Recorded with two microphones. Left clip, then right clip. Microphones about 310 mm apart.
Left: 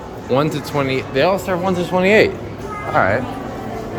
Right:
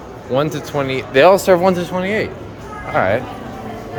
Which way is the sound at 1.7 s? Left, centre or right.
Centre.